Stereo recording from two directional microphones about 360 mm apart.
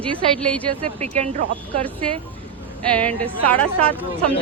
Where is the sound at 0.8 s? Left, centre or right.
Centre.